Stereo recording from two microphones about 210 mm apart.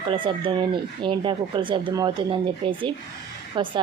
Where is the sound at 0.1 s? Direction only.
25° right (ahead or behind).